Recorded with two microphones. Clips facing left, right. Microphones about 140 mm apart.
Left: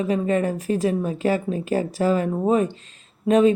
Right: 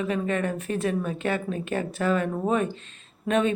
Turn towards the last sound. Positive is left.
turn(degrees=35)  # may be behind; listen again after turning